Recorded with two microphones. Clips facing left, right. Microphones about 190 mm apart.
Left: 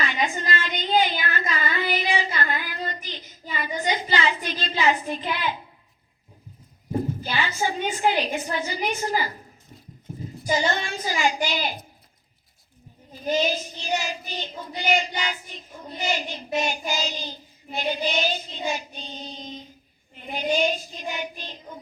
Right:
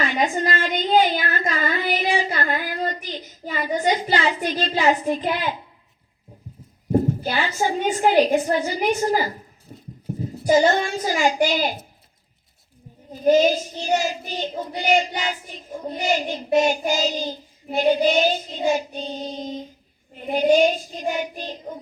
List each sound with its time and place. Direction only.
0.0 s a sound: 45° right (ahead or behind)
4.4 s child singing: 45° right (ahead or behind)
6.9 s child singing: 45° right (ahead or behind)
10.4 s child singing: 45° right (ahead or behind)
13.2 s child singing: 45° right (ahead or behind)